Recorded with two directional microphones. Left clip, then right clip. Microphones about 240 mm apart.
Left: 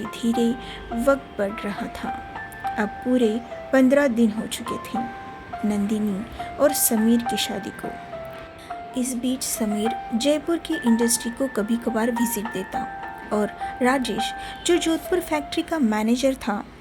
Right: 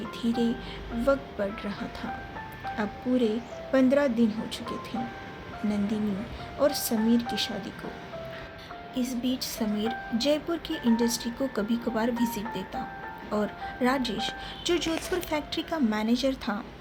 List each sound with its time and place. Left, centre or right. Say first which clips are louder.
0.2 s speech: left 6 dB; left
6.6 s speech: left 5 dB; left
9.0 s speech: left 3 dB; left